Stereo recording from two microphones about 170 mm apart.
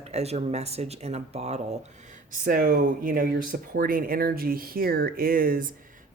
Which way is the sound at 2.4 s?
60° right (ahead or behind).